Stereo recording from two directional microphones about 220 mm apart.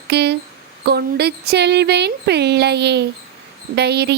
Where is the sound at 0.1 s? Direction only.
50° right (ahead or behind).